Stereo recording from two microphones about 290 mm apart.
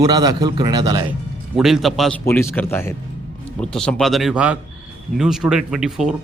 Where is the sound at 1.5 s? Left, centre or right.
Centre.